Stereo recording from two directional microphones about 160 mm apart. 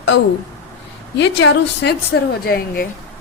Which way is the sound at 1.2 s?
90° left.